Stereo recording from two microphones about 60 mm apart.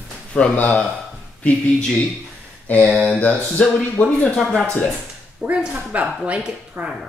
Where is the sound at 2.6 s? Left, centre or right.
Left.